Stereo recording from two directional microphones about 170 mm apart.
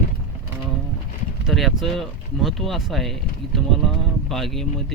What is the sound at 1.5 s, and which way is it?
Speech, centre (ahead or behind).